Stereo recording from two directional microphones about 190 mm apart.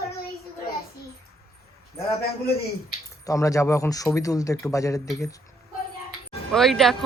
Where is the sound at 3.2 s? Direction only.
15° left (ahead or behind).